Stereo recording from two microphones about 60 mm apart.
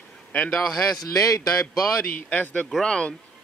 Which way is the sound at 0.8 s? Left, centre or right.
Left.